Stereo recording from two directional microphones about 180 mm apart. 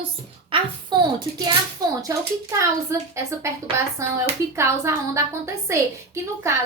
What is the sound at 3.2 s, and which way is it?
Speech, 15° right (ahead or behind).